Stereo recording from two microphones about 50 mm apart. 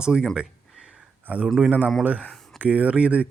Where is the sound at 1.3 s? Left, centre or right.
Right.